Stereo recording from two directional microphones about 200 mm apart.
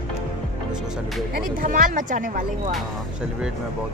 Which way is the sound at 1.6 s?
40° right (ahead or behind).